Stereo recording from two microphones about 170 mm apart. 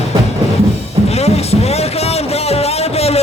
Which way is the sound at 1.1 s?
40° left (ahead or behind).